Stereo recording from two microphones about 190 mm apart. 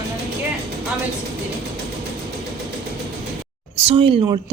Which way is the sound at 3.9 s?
30° right (ahead or behind).